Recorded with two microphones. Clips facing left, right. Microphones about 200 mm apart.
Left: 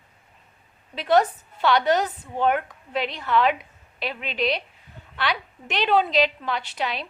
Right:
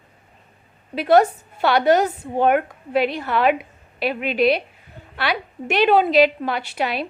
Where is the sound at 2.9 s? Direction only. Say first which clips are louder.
Right 8 dB; 10° right (ahead or behind).